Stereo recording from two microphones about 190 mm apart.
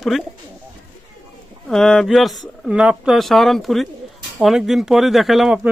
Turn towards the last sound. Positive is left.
turn(degrees=0)  # may be behind; listen again after turning